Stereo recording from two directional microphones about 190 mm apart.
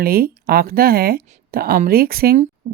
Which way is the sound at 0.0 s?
50° right (ahead or behind).